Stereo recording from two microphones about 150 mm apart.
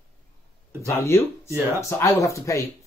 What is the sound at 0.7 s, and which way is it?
Speech, 15° right (ahead or behind).